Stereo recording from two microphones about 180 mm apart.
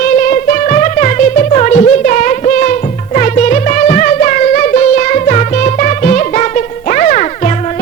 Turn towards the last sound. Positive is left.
turn(degrees=45)  # may be behind; listen again after turning